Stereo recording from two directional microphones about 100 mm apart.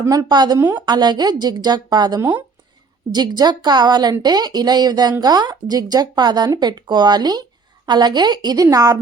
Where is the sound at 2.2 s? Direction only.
15° right (ahead or behind).